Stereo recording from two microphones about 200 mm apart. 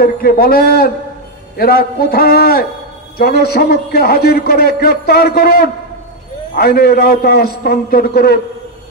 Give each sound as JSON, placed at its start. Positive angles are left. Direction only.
{"t": 0.0, "sound": "a man's voice", "side_deg": 50}